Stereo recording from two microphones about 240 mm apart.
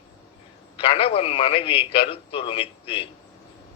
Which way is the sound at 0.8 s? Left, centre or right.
Left.